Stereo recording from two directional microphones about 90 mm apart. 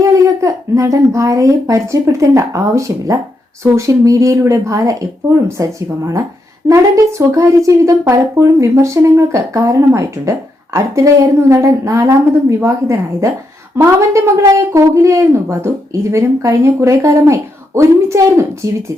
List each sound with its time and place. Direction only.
0.0 s speech: 35° right (ahead or behind)